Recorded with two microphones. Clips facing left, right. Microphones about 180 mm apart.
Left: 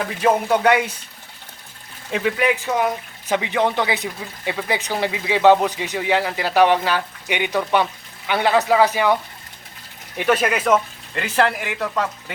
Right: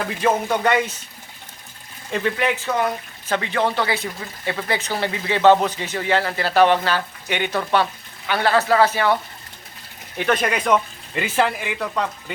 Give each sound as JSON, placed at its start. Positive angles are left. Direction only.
{"t": 0.2, "sound": "speech", "side_deg": 10}
{"t": 2.1, "sound": "speech", "side_deg": 5}
{"t": 10.2, "sound": "speech", "side_deg": 5}